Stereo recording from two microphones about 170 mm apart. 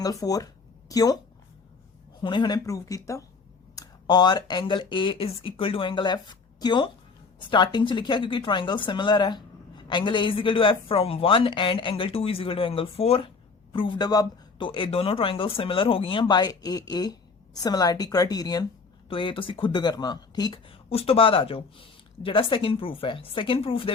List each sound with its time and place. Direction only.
0.0 s a woman's voice: 20° left (ahead or behind)
2.2 s a woman's voice: 25° left (ahead or behind)